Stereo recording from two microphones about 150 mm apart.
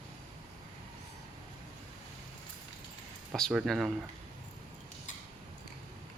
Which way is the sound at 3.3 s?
Centre (ahead or behind).